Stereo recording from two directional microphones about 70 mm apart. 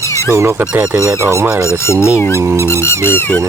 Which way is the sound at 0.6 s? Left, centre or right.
Centre.